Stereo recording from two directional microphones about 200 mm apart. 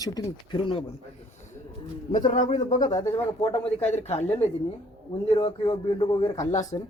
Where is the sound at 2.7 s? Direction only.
20° left (ahead or behind).